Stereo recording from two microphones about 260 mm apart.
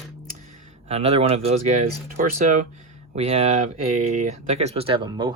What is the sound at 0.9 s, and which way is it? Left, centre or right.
Speech, right.